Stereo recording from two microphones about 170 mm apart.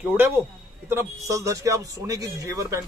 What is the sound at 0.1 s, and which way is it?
A man's voice, 10° right (ahead or behind).